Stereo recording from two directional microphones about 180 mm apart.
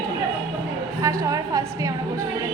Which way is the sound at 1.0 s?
20° right (ahead or behind).